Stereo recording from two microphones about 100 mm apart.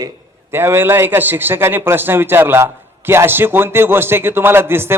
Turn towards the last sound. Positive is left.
turn(degrees=-25)  # may be behind; listen again after turning